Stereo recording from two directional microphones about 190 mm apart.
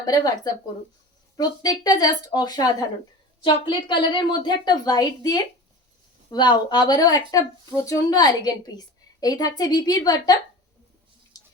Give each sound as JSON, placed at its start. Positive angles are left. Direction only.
{"t": 0.0, "sound": "speech", "side_deg": 20}